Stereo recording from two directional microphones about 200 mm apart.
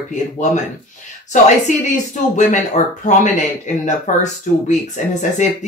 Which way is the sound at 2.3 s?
40° left (ahead or behind).